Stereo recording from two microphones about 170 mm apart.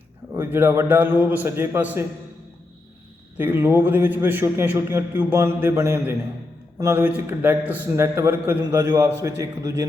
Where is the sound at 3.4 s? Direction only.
10° right (ahead or behind).